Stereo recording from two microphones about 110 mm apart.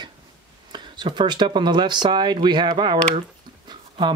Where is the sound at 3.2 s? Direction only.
45° right (ahead or behind).